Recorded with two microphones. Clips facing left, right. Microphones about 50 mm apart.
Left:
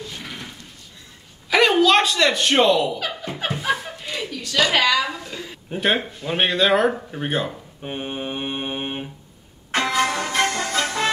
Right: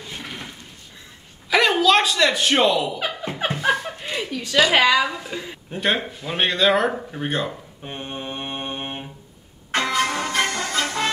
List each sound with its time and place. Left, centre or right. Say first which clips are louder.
1.5 s speech: left 1 dB; centre
3.0 s music: right 1 dB; centre
3.6 s chuckle: right 3 dB; centre
4.0 s chuckle: right 2 dB; right
4.7 s a woman's voice: right 2 dB; right
5.2 s a sound: right 2 dB; centre
5.7 s speech: left 1 dB; centre
9.7 s music: left 1 dB; centre